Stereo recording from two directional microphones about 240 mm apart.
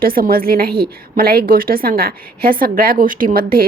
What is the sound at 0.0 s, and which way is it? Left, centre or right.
A woman's voice, right.